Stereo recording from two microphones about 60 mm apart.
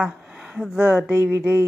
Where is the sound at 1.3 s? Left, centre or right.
Right.